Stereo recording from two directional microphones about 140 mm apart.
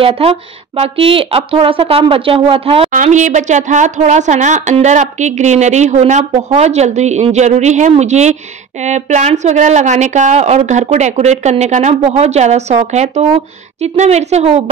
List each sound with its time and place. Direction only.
0.0 s speech: 45° right (ahead or behind)
2.9 s a woman's voice: 60° right (ahead or behind)